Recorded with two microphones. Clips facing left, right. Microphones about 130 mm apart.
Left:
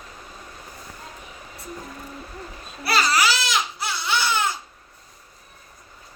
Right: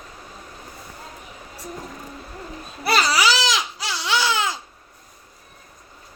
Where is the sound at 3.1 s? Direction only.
90° right.